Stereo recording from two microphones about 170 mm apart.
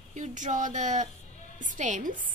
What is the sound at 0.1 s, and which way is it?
A woman's voice, 45° right (ahead or behind).